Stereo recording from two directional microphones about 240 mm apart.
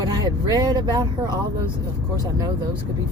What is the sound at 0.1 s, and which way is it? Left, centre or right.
Speech, centre.